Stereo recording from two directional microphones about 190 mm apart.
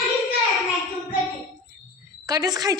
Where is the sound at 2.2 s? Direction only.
20° right (ahead or behind).